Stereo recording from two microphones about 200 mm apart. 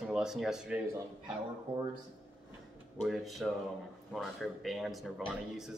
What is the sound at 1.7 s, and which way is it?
Speech, 30° right (ahead or behind).